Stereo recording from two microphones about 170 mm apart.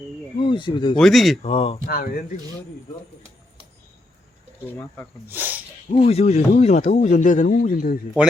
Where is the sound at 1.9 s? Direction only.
60° left (ahead or behind).